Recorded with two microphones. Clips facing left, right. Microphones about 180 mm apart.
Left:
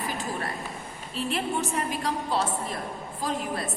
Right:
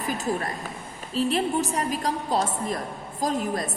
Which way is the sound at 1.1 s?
40° right (ahead or behind).